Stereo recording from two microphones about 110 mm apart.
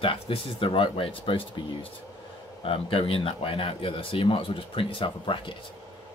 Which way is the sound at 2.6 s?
60° left (ahead or behind).